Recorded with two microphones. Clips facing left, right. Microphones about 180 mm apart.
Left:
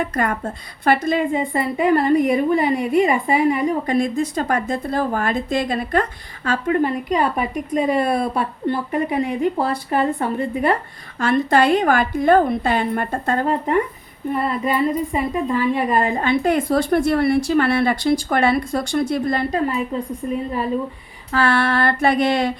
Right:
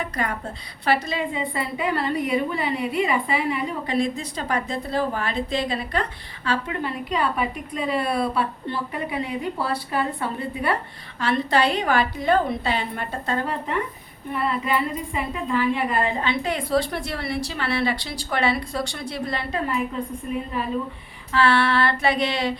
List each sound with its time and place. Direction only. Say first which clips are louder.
0.0 s a woman's voice: left 6 dB; 50° left (ahead or behind)